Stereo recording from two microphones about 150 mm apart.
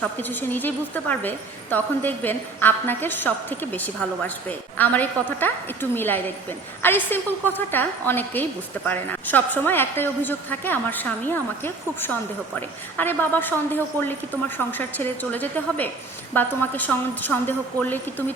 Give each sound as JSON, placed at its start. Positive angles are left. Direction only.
{"t": 0.0, "sound": "a woman's voice", "side_deg": 10}